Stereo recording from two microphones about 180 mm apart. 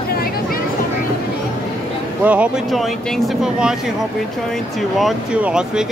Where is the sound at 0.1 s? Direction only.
55° left (ahead or behind).